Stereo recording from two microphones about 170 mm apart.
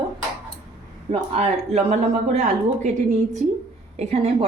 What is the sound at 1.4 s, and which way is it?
A woman's voice, 40° right (ahead or behind).